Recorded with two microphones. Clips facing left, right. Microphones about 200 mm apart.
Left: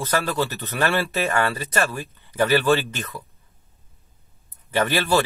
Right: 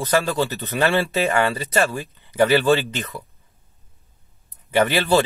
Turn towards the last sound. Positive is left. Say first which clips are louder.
# right 3 dB
turn(degrees=-20)  # may be behind; listen again after turning